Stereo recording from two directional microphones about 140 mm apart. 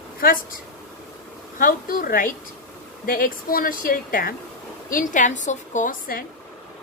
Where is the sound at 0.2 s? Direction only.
90° left.